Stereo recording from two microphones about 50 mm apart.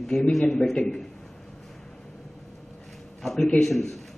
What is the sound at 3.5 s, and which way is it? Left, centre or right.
Speech, centre.